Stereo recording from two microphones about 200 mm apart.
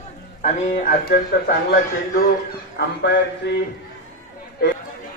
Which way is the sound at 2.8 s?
60° left (ahead or behind).